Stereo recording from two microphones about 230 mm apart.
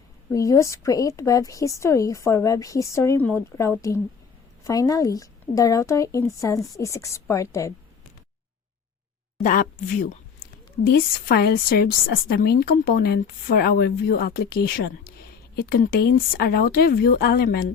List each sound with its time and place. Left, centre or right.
0.3 s a woman's voice: centre
9.4 s a woman's voice: left